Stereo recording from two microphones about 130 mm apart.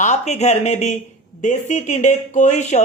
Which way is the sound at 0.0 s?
65° left (ahead or behind).